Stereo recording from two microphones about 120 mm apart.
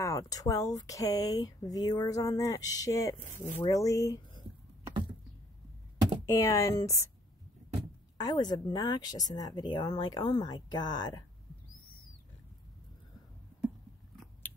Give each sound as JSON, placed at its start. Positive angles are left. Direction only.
{"t": 0.0, "sound": "speech", "side_deg": 25}
{"t": 6.2, "sound": "speech", "side_deg": 25}
{"t": 8.2, "sound": "speech", "side_deg": 35}